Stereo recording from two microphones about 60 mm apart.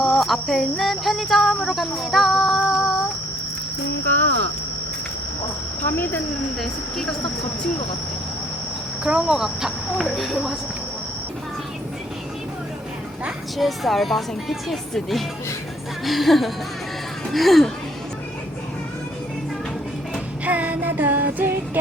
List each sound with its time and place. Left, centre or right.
0.0 s speech: centre
5.8 s speech: left
6.6 s speech: centre
9.0 s speech: centre
13.6 s speech: centre
20.4 s music: right